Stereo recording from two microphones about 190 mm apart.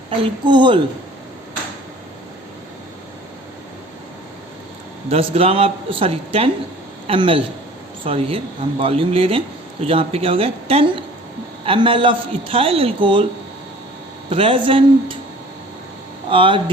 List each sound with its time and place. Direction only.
0.2 s a man's voice: 25° right (ahead or behind)
5.0 s a man's voice: 30° right (ahead or behind)
14.3 s a man's voice: 30° right (ahead or behind)
16.3 s a man's voice: 25° right (ahead or behind)